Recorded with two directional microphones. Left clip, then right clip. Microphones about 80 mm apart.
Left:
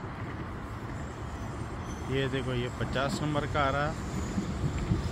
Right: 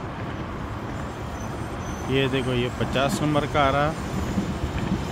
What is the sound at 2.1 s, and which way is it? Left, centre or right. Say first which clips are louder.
Speech: right 8 dB; right.